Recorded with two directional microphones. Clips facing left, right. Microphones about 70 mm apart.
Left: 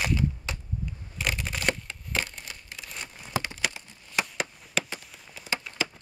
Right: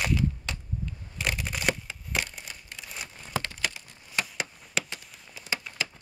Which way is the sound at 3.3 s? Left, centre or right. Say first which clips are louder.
Left 1 dB; centre.